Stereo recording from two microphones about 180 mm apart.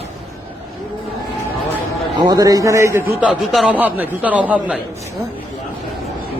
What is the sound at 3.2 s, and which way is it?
A man's voice, 5° right (ahead or behind).